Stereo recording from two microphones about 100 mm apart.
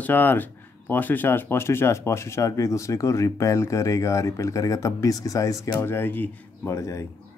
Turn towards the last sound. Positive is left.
turn(degrees=30)  # may be behind; listen again after turning